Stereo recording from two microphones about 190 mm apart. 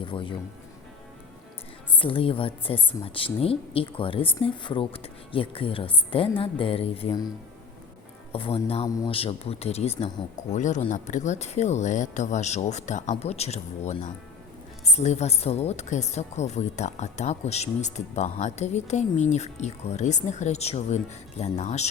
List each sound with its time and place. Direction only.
0.0 s speech: 25° left (ahead or behind)
2.0 s a woman's voice: 30° left (ahead or behind)
8.3 s a woman's voice: 30° left (ahead or behind)